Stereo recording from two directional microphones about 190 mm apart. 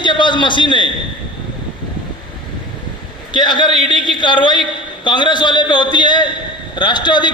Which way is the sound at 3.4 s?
25° left (ahead or behind).